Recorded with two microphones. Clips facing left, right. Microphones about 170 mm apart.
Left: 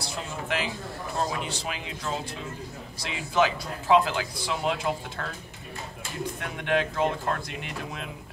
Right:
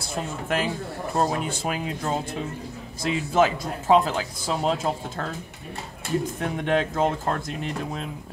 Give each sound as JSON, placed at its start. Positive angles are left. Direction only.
{"t": 0.0, "sound": "a man's voice", "side_deg": -50}